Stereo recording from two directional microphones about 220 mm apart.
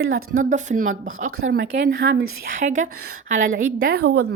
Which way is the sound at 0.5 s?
35° right (ahead or behind).